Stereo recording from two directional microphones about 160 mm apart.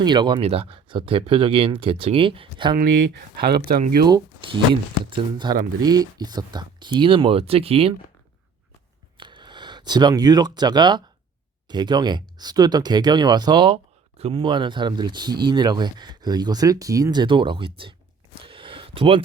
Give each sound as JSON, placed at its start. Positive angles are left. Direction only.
{"t": 0.0, "sound": "speech", "side_deg": -30}
{"t": 2.7, "sound": "speech", "side_deg": -85}
{"t": 4.0, "sound": "speech", "side_deg": -30}
{"t": 9.1, "sound": "speech", "side_deg": -30}
{"t": 18.4, "sound": "a sound", "side_deg": -35}